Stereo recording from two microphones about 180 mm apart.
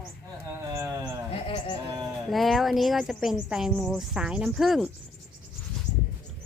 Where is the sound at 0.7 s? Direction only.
15° right (ahead or behind).